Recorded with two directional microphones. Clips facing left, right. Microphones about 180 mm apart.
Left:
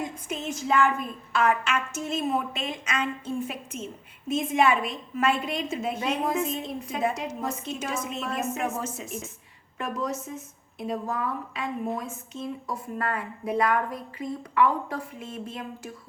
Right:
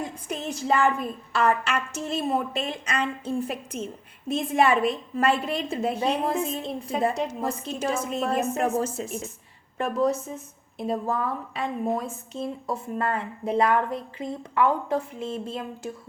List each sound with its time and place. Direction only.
0.0 s a woman's voice: 35° right (ahead or behind)